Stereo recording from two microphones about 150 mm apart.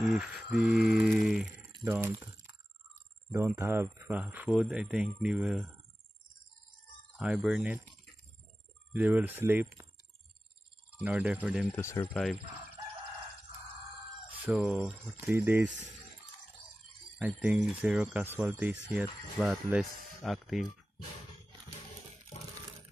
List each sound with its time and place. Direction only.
0.0 s speech: 5° right (ahead or behind)
0.6 s a sound: centre (ahead or behind)
1.9 s speech: 15° right (ahead or behind)
3.3 s speech: 15° right (ahead or behind)
7.2 s speech: 5° right (ahead or behind)
8.9 s speech: 15° right (ahead or behind)
11.0 s speech: 10° right (ahead or behind)
11.7 s speech: 15° left (ahead or behind)
12.1 s speech: centre (ahead or behind)
14.4 s speech: 10° right (ahead or behind)
17.2 s speech: 10° right (ahead or behind)